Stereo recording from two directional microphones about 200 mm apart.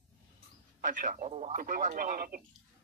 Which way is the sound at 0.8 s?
40° right (ahead or behind).